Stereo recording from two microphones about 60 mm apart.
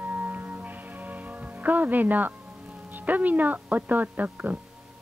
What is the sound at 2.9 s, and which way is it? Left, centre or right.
Speech, right.